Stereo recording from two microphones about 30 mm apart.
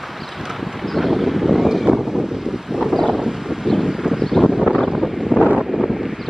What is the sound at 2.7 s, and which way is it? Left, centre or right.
Wind, centre.